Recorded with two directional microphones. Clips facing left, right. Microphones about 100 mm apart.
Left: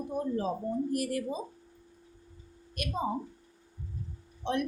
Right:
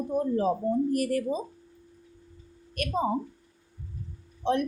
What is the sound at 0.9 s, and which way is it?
Speech, 50° right (ahead or behind).